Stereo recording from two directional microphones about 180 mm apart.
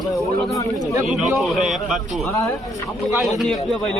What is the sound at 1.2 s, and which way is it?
Speech, centre (ahead or behind).